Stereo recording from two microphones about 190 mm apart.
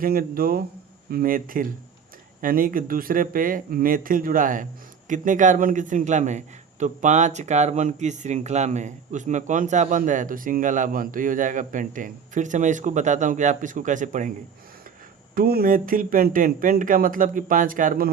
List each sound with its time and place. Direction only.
0.0 s a man's voice: 50° right (ahead or behind)
15.4 s speech: 50° right (ahead or behind)